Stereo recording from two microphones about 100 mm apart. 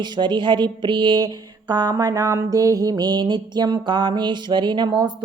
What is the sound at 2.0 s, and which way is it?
Speech, 35° right (ahead or behind).